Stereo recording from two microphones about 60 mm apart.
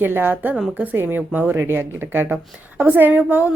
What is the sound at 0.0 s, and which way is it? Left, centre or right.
Speech, right.